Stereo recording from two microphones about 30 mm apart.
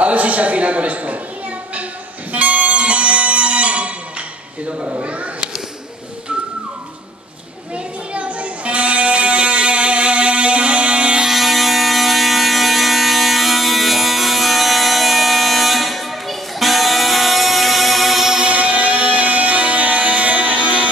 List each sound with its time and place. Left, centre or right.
0.0 s a man's voice: right
2.3 s music: right
2.8 s music: right
5.0 s a sound: right
7.7 s a sound: right
11.2 s fire alarm: centre
18.5 s music: right